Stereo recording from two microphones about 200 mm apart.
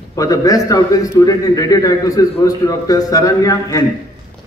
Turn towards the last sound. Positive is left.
turn(degrees=20)  # may be behind; listen again after turning